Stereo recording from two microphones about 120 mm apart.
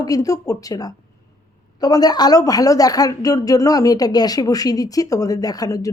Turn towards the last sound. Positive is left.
turn(degrees=30)  # may be behind; listen again after turning